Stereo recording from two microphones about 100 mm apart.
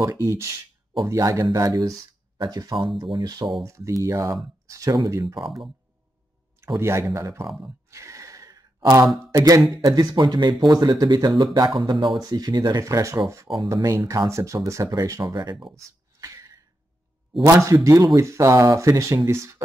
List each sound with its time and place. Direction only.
0.0 s speech: 30° right (ahead or behind)
2.5 s speech: 45° right (ahead or behind)
3.6 s speech: 30° right (ahead or behind)
6.8 s speech: 30° right (ahead or behind)
7.6 s a sound: 30° right (ahead or behind)
9.8 s speech: 40° right (ahead or behind)
11.5 s speech: 50° right (ahead or behind)
15.7 s a sound: 30° right (ahead or behind)
17.5 s speech: 30° right (ahead or behind)